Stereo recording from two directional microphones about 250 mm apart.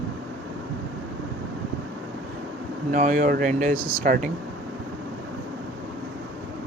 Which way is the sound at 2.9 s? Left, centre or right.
Right.